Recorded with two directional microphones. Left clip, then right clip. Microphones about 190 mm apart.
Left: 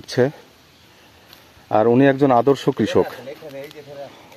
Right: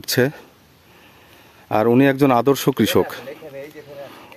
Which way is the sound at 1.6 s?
30° right (ahead or behind).